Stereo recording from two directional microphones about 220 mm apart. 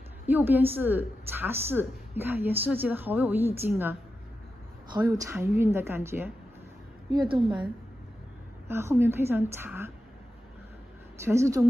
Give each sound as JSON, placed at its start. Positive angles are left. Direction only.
{"t": 0.3, "sound": "a woman's voice", "side_deg": -10}
{"t": 4.9, "sound": "a woman's voice", "side_deg": -15}
{"t": 7.1, "sound": "a woman's voice", "side_deg": -20}
{"t": 8.6, "sound": "a woman's voice", "side_deg": -10}
{"t": 11.1, "sound": "a woman's voice", "side_deg": -10}